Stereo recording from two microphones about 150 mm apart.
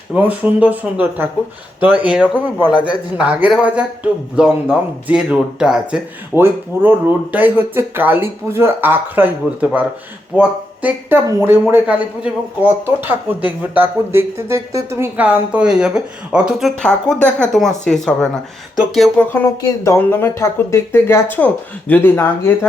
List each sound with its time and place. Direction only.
0.1 s speech: 10° right (ahead or behind)
2.6 s a man's voice: 30° left (ahead or behind)
3.2 s speech: 10° right (ahead or behind)
19.3 s speech: 15° left (ahead or behind)